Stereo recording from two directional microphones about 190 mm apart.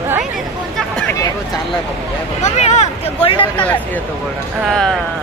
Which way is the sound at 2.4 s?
35° left (ahead or behind).